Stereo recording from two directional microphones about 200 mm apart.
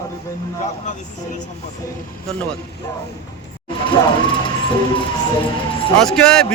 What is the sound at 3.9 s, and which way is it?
Speech, 25° left (ahead or behind).